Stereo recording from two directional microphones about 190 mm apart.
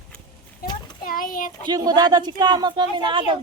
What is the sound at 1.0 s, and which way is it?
Speech, 45° left (ahead or behind).